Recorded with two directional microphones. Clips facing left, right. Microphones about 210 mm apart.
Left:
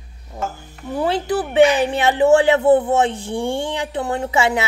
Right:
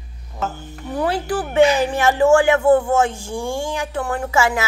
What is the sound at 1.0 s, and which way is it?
Speech, 20° left (ahead or behind).